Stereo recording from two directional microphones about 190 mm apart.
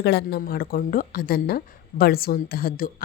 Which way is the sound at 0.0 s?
60° left (ahead or behind).